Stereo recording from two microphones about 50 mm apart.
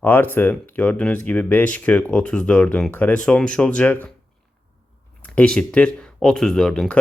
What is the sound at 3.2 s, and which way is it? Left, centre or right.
Speech, centre.